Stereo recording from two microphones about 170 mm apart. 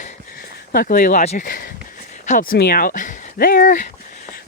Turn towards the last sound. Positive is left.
turn(degrees=55)  # may be behind; listen again after turning